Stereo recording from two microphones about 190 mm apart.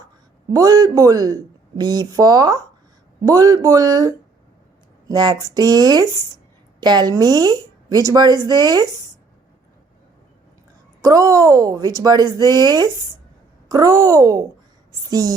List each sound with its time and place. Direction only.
0.5 s speech: 20° right (ahead or behind)
11.0 s speech: 15° right (ahead or behind)